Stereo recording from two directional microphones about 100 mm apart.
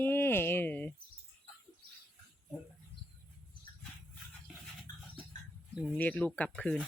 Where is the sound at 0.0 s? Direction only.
20° left (ahead or behind).